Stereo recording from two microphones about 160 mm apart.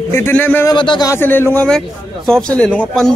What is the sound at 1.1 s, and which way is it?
Speech, 15° left (ahead or behind).